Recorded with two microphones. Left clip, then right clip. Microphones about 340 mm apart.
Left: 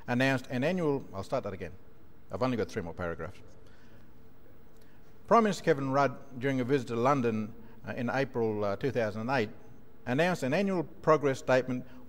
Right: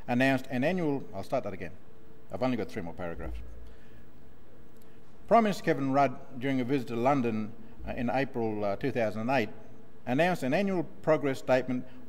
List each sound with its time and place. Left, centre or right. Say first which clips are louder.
0.0 s a man's voice: right 2 dB; left
5.3 s a man's voice: even; left